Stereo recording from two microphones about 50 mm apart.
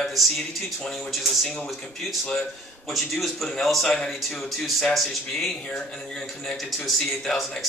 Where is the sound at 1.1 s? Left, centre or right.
Centre.